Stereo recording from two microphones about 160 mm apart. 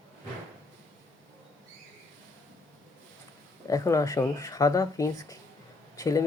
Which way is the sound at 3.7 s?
20° left (ahead or behind).